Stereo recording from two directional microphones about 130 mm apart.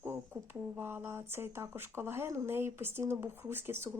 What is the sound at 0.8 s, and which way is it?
Speech, 15° right (ahead or behind).